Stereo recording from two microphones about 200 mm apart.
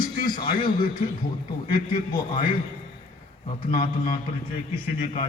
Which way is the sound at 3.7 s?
45° left (ahead or behind).